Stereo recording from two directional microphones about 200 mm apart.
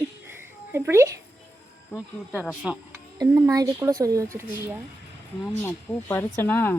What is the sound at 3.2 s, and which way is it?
A woman's voice, 20° right (ahead or behind).